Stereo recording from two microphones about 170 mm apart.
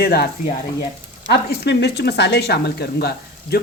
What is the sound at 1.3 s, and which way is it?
Speech, 80° left.